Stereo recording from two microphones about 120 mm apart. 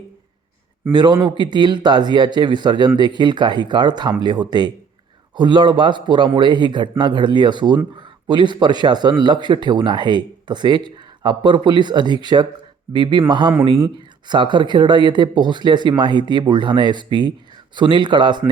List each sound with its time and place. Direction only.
0.9 s speech: 35° right (ahead or behind)